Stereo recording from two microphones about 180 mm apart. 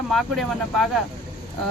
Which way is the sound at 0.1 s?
Centre (ahead or behind).